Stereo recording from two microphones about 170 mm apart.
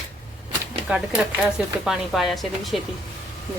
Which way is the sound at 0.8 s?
5° right (ahead or behind).